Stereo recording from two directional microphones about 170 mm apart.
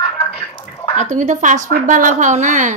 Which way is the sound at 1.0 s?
45° right (ahead or behind).